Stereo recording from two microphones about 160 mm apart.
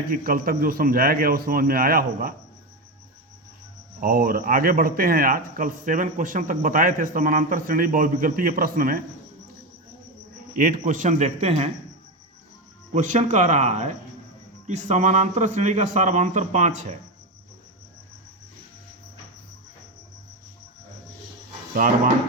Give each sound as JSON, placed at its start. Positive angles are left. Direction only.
{"t": 0.1, "sound": "a man's voice", "side_deg": -65}
{"t": 4.0, "sound": "a man's voice", "side_deg": -65}
{"t": 10.5, "sound": "speech", "side_deg": -60}
{"t": 12.9, "sound": "speech", "side_deg": -50}
{"t": 21.8, "sound": "a man's voice", "side_deg": -55}